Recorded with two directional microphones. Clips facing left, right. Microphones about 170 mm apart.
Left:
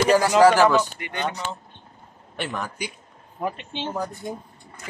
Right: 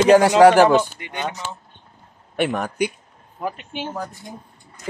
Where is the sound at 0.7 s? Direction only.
15° right (ahead or behind).